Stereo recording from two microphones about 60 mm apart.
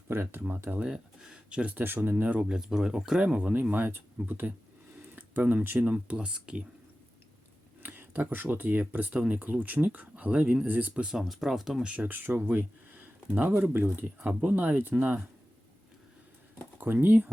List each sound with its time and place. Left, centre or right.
0.1 s speech: right
0.8 s speech: centre
1.7 s speech: right
2.3 s speech: centre
7.8 s speech: right
11.1 s speech: centre
11.9 s speech: right
16.8 s speech: right